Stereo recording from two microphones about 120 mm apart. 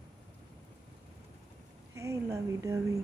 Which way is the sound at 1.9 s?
25° right (ahead or behind).